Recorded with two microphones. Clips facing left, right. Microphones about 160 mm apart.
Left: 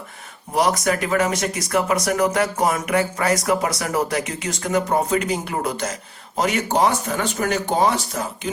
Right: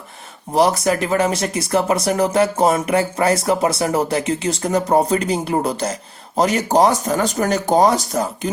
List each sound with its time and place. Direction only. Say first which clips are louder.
0.5 s speech: right 4 dB; 30° right (ahead or behind)